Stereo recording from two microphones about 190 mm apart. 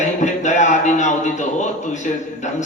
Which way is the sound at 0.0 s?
40° left (ahead or behind).